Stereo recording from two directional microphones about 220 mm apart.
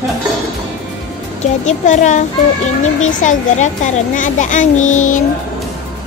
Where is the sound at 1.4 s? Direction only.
35° left (ahead or behind).